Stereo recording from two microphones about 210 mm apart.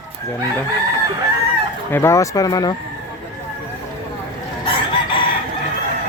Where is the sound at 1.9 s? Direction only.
10° left (ahead or behind).